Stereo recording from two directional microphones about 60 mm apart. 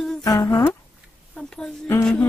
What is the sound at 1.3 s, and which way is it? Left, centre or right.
Speech, centre.